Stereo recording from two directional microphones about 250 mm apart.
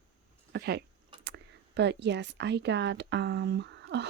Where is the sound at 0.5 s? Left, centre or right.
Right.